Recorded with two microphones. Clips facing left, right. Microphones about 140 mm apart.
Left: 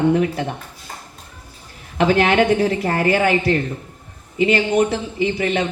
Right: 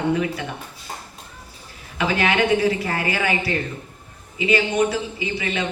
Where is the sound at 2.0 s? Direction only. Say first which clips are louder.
Left 5 dB; 50° left (ahead or behind).